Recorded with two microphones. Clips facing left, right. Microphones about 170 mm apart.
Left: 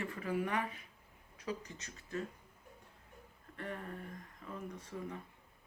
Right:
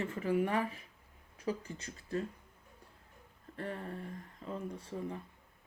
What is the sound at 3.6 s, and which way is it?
Speech, 35° right (ahead or behind).